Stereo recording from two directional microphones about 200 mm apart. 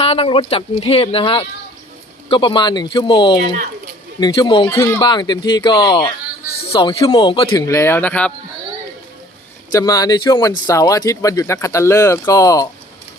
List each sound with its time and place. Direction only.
0.0 s speech: 30° left (ahead or behind); by 8.3 s 5° left (ahead or behind)
9.7 s speech: 20° left (ahead or behind)